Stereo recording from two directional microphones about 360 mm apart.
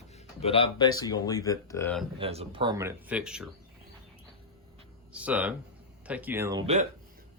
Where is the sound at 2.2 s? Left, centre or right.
Centre.